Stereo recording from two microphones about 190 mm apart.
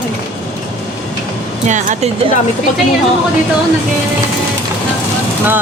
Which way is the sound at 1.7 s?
40° right (ahead or behind).